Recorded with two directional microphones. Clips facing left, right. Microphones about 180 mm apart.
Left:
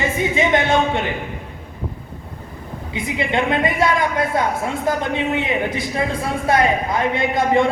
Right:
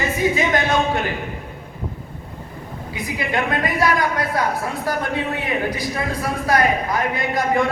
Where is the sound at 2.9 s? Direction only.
25° left (ahead or behind).